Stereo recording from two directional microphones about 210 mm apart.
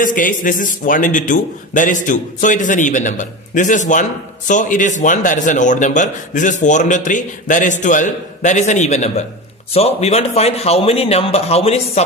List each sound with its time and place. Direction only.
0.0 s a man's voice: 40° left (ahead or behind)